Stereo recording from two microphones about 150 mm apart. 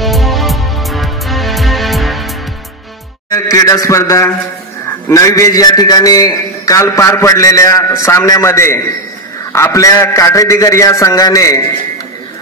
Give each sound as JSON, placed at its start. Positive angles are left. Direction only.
{"t": 0.0, "sound": "music", "side_deg": 0}
{"t": 3.3, "sound": "a man's voice", "side_deg": 20}